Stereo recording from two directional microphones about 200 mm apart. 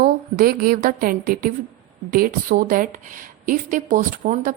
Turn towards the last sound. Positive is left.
turn(degrees=-40)  # may be behind; listen again after turning